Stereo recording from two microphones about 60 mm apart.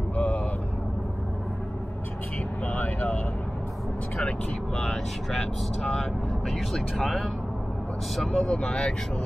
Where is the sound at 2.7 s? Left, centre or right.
Left.